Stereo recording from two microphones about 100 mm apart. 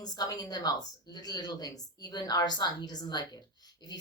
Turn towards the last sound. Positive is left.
turn(degrees=45)  # may be behind; listen again after turning